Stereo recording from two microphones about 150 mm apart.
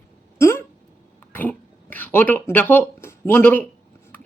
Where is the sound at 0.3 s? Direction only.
20° left (ahead or behind).